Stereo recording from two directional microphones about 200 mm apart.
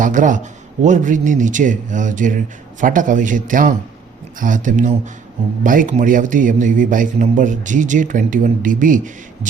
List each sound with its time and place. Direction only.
0.0 s a man's voice: 40° right (ahead or behind)